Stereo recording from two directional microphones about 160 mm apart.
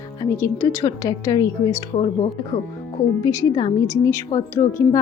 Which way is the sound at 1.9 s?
45° left (ahead or behind).